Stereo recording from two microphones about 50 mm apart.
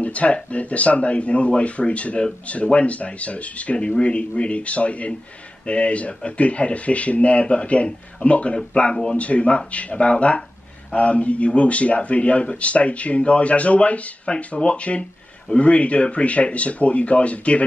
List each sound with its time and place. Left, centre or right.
0.0 s speech: left
9.1 s speech: left